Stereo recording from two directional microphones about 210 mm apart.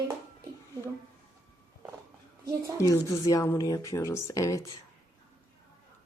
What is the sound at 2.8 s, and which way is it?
A woman's voice, 15° left (ahead or behind).